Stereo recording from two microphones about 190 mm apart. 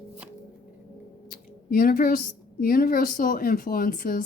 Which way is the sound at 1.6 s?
50° left (ahead or behind).